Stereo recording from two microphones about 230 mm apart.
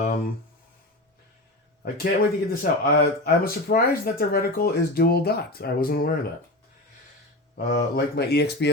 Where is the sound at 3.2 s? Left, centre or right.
Left.